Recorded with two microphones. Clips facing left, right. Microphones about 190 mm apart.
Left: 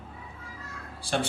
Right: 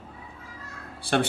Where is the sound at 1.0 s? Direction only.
60° right (ahead or behind).